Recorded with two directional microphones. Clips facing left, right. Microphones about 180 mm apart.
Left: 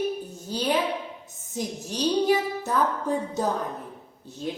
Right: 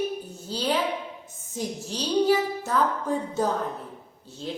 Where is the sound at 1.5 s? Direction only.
15° left (ahead or behind).